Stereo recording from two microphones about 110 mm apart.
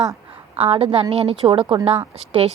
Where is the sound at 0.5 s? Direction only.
65° right (ahead or behind).